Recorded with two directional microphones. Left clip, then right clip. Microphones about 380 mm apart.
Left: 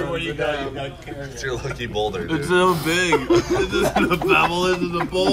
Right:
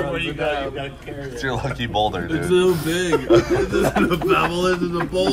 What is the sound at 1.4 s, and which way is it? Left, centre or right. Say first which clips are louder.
Speech: right 2 dB; centre.